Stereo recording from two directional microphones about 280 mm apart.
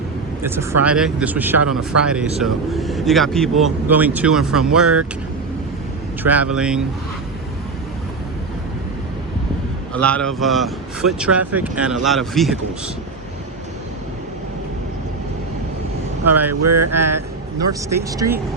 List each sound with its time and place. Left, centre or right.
0.4 s a man's voice: centre
6.2 s a man's voice: centre
9.9 s a man's voice: centre
16.5 s speech: right
17.8 s speech: centre